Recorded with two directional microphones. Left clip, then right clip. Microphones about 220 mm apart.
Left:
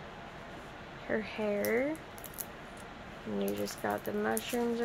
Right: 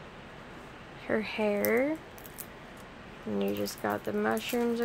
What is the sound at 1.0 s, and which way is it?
Speech, 20° right (ahead or behind).